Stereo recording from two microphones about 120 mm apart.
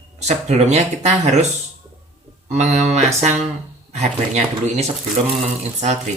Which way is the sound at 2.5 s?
70° right (ahead or behind).